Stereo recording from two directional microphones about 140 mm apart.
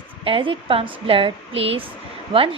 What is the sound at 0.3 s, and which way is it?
Speech, 40° right (ahead or behind).